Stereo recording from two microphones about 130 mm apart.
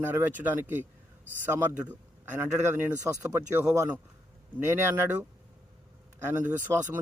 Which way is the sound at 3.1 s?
25° right (ahead or behind).